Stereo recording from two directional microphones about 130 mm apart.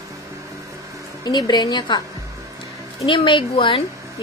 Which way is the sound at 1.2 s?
35° left (ahead or behind).